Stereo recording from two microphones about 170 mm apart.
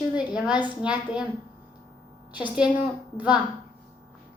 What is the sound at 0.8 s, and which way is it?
Speech, 5° right (ahead or behind).